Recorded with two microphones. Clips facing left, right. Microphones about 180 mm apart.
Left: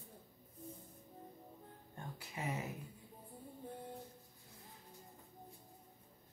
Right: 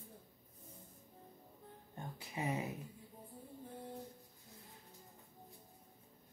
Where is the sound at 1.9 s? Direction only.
20° right (ahead or behind).